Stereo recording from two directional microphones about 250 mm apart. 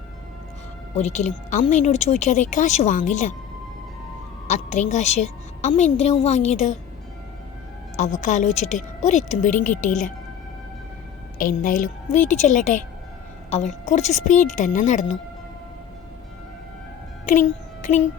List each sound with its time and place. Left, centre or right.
0.9 s speech: left
4.4 s speech: left
7.9 s speech: left
11.3 s a woman's voice: left
17.2 s music: left